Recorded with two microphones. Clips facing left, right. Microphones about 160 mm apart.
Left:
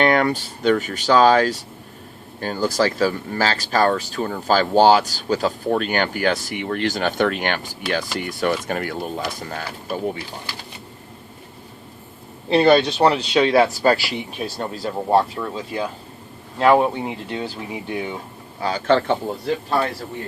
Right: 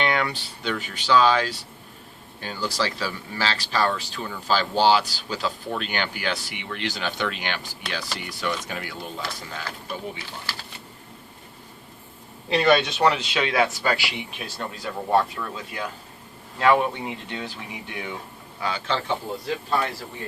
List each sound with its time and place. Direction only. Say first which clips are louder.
0.0 s speech: left 7 dB; 45° left (ahead or behind)
12.5 s speech: left 5 dB; 35° left (ahead or behind)
18.9 s speech: left 12 dB; 55° left (ahead or behind)